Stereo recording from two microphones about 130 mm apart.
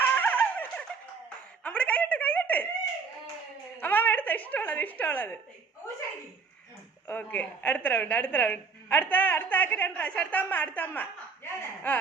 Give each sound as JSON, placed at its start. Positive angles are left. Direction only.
{"t": 0.2, "sound": "a sound", "side_deg": 15}
{"t": 3.8, "sound": "a woman's voice", "side_deg": 15}
{"t": 7.1, "sound": "a woman's voice", "side_deg": 15}
{"t": 11.4, "sound": "chuckle", "side_deg": 15}